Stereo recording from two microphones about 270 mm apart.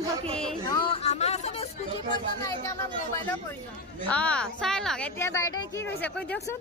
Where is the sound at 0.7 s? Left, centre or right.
Centre.